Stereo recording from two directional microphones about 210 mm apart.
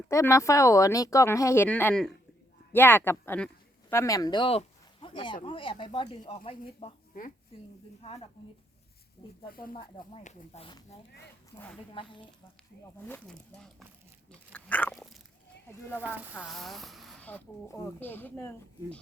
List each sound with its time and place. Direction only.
0.1 s speech: 15° left (ahead or behind)
7.1 s a woman's voice: 40° left (ahead or behind)
8.0 s speech: 30° left (ahead or behind)
9.5 s speech: 45° left (ahead or behind)
9.7 s speech: 30° left (ahead or behind)
13.1 s speech: 5° left (ahead or behind)
16.0 s speech: 10° right (ahead or behind); by 18.4 s 10° left (ahead or behind)